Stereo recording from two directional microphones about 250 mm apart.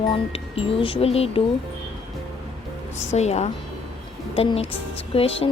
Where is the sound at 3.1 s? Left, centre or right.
Left.